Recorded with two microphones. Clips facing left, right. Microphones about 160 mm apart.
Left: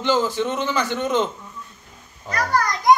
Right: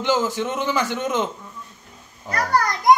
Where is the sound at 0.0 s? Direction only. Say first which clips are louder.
Left 1 dB; 15° right (ahead or behind).